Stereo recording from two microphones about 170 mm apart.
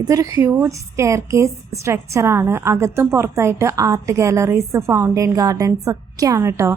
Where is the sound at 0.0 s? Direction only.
20° right (ahead or behind).